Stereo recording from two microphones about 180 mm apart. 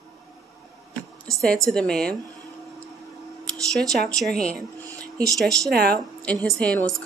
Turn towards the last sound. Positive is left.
turn(degrees=0)  # may be behind; listen again after turning